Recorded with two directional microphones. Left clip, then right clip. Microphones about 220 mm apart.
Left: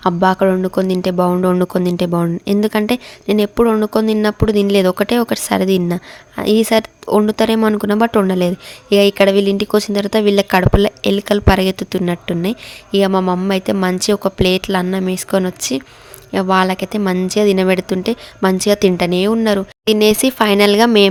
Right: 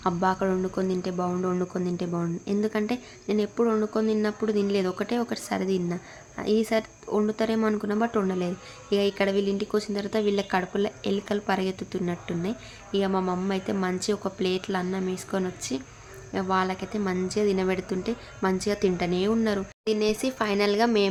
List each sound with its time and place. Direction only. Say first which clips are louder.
0.0 s speech: left 12 dB; 40° left (ahead or behind)